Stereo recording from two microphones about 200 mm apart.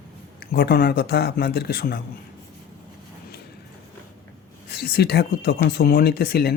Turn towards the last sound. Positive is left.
turn(degrees=50)  # may be behind; listen again after turning